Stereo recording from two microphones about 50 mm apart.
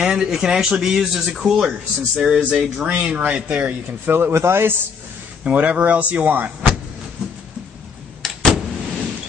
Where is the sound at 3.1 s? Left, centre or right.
Right.